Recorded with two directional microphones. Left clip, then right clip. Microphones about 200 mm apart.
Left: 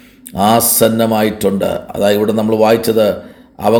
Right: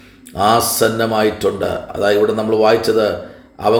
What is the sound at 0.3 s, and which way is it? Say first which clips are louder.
Speech: left 2 dB; 50° left (ahead or behind).